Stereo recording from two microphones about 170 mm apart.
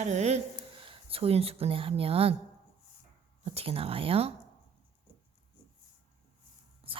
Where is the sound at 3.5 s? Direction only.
35° right (ahead or behind).